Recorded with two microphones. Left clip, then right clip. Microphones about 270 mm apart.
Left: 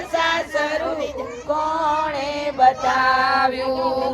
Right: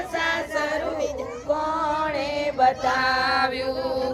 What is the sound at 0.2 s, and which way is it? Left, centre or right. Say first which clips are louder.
Choir: left 4 dB; left.